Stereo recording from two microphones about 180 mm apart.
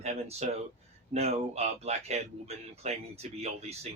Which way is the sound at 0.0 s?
35° right (ahead or behind).